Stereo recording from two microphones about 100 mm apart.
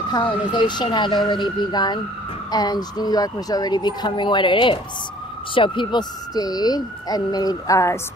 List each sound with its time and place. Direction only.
0.1 s speech: 50° left (ahead or behind); by 8.0 s 30° left (ahead or behind)